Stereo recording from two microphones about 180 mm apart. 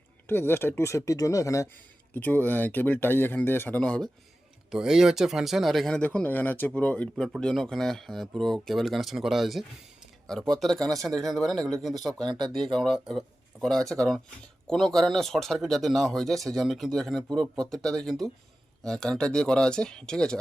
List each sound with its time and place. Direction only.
0.3 s speech: 10° left (ahead or behind)